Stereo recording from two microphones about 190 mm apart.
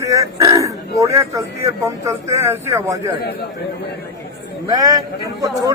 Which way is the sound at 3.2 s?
55° left (ahead or behind).